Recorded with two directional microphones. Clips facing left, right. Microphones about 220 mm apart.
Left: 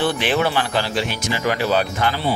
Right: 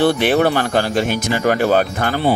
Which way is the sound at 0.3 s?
45° right (ahead or behind).